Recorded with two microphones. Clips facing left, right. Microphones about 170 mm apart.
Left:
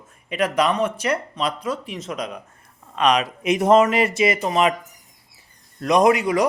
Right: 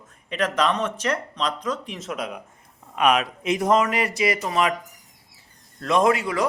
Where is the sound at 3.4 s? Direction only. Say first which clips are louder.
Left 7 dB; 20° left (ahead or behind).